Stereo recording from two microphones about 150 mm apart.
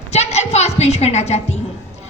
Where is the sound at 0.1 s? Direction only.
45° left (ahead or behind).